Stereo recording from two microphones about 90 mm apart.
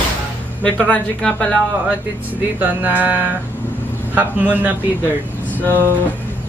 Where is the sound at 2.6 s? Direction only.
20° right (ahead or behind).